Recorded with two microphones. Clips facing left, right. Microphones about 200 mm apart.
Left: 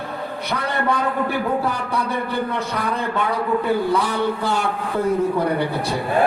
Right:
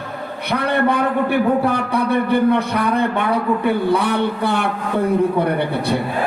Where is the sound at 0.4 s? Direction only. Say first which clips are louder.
Right 6 dB; 60° right (ahead or behind).